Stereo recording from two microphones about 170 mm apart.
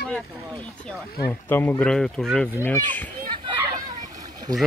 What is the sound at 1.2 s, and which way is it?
A child's voice, 15° left (ahead or behind).